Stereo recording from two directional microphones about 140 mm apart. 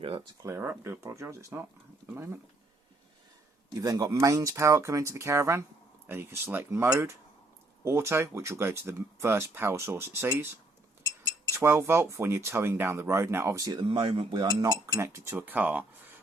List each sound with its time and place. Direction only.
0.4 s speech: 20° right (ahead or behind)
3.7 s speech: 25° right (ahead or behind)
11.5 s speech: 20° right (ahead or behind)